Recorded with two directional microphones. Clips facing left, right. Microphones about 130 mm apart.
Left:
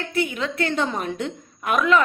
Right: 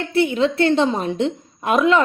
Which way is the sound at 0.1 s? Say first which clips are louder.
Right 9 dB; 30° right (ahead or behind).